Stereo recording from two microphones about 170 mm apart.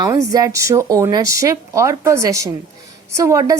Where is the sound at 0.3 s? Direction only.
20° right (ahead or behind).